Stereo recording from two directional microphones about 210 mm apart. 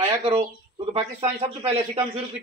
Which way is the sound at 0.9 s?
30° right (ahead or behind).